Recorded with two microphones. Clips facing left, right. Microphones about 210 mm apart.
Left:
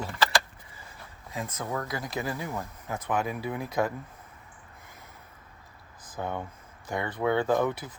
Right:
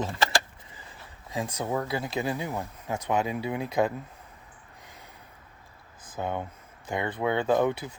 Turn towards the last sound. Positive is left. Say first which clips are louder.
# right 1 dB
turn(degrees=-20)  # may be behind; listen again after turning